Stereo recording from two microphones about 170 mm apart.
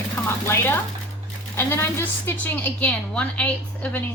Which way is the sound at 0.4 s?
15° left (ahead or behind).